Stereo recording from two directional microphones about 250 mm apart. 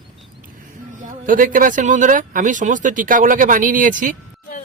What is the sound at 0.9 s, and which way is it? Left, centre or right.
Speech, right.